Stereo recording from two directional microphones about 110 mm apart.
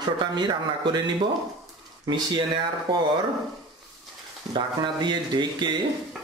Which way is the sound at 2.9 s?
45° right (ahead or behind).